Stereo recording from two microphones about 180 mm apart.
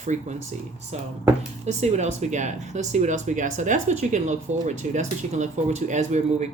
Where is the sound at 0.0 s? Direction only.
40° right (ahead or behind).